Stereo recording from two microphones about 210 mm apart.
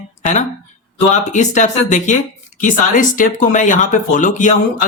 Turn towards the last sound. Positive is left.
turn(degrees=35)  # may be behind; listen again after turning